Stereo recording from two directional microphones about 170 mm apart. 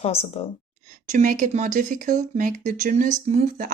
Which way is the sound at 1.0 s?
50° right (ahead or behind).